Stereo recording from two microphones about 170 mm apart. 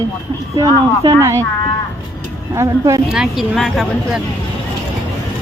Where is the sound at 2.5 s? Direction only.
20° right (ahead or behind).